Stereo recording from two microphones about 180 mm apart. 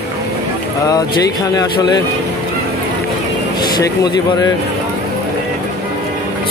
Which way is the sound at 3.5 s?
25° left (ahead or behind).